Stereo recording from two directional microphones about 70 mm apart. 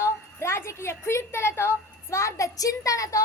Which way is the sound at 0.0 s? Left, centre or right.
Left.